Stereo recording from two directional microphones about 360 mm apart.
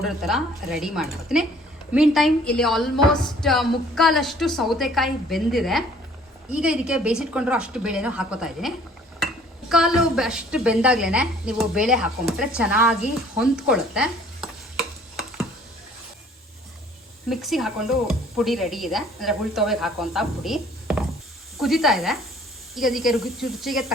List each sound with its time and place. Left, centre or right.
0.0 s a woman's voice: centre
13.4 s stir: centre
17.2 s a woman's voice: centre